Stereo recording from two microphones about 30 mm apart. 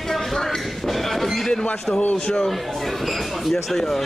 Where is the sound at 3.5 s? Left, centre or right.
Centre.